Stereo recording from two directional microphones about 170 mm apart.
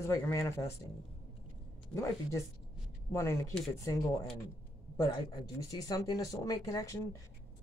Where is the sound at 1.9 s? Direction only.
15° left (ahead or behind).